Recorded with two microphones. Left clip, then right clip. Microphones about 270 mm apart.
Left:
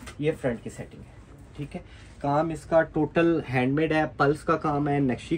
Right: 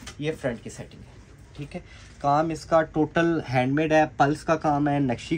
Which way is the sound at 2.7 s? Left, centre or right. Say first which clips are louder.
Right 1 dB; right.